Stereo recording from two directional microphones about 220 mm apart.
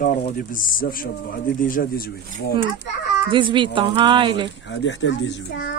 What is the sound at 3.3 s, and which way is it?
Speech, 20° right (ahead or behind).